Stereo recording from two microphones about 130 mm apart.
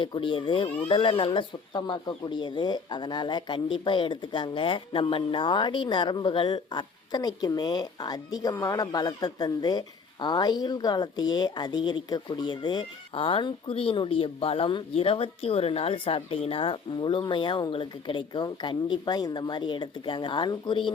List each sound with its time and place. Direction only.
0.0 s speech: 40° left (ahead or behind)